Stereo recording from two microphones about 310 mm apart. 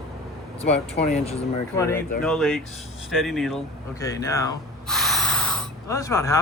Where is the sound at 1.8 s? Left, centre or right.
Centre.